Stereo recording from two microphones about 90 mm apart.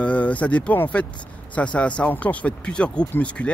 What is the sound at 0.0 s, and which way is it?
Speech, 15° left (ahead or behind).